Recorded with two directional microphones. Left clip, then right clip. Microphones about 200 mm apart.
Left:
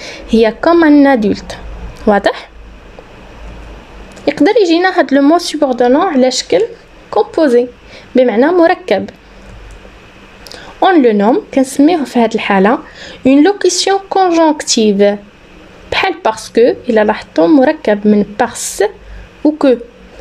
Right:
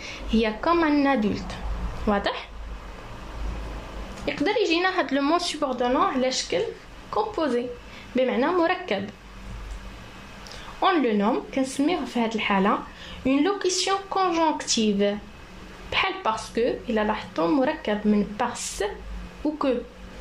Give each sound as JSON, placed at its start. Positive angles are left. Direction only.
{"t": 0.0, "sound": "speech", "side_deg": 45}
{"t": 4.3, "sound": "speech", "side_deg": 50}
{"t": 10.5, "sound": "speech", "side_deg": 45}